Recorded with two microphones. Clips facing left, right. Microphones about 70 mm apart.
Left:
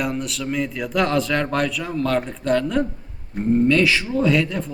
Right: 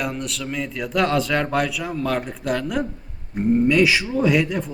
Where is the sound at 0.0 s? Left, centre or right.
Centre.